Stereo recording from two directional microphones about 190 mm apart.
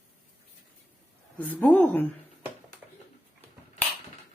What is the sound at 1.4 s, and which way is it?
Speech, 10° left (ahead or behind).